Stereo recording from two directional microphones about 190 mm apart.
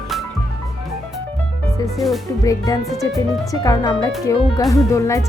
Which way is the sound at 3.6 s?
20° left (ahead or behind).